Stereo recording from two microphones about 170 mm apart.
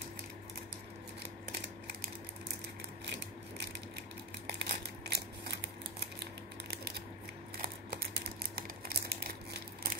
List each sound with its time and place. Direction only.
4.5 s crumpling: 75° right (ahead or behind)
6.7 s a sound: 70° right (ahead or behind)
8.5 s crumpling: 65° right (ahead or behind)